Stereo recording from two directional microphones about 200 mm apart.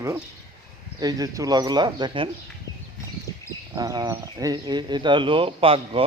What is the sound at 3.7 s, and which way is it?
Speech, 20° right (ahead or behind).